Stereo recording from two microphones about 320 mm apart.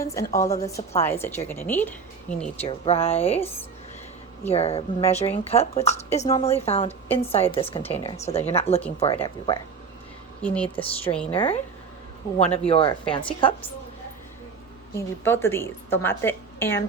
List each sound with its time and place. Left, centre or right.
0.0 s a woman's voice: centre
2.6 s speech: centre
4.4 s a woman's voice: centre
10.4 s a woman's voice: centre
11.3 s speech: centre
14.9 s speech: centre